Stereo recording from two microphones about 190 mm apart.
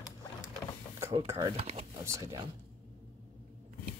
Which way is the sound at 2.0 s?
15° right (ahead or behind).